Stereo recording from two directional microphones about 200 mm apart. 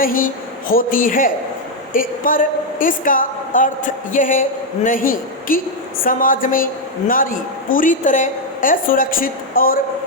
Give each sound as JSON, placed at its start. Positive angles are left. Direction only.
{"t": 0.0, "sound": "a woman's voice", "side_deg": 45}